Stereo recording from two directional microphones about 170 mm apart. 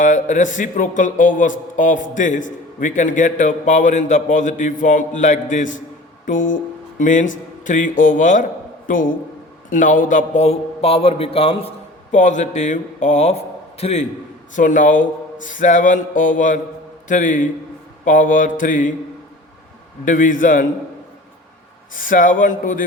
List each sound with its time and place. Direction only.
0.0 s a man's voice: 45° left (ahead or behind)
12.1 s speech: 45° left (ahead or behind)
20.1 s speech: 50° left (ahead or behind)
21.9 s speech: 50° left (ahead or behind)